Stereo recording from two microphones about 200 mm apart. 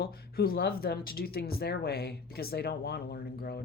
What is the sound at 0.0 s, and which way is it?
Speech, 50° left (ahead or behind).